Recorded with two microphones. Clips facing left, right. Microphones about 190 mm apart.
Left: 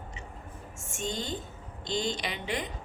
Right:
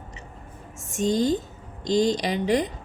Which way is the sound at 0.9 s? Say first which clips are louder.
Right 13 dB; 40° right (ahead or behind).